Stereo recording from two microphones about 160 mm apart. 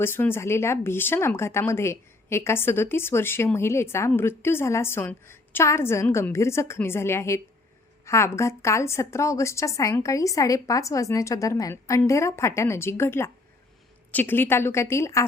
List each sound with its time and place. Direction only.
0.0 s a woman's voice: 15° left (ahead or behind)